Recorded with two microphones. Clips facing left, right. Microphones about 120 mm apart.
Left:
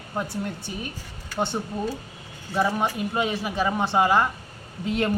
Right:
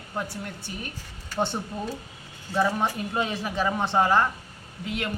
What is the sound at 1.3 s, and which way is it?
Speech, centre (ahead or behind).